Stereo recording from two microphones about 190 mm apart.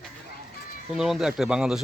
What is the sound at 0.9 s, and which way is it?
Speech, centre (ahead or behind).